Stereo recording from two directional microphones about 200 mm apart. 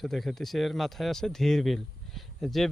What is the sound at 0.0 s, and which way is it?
Speech, centre (ahead or behind).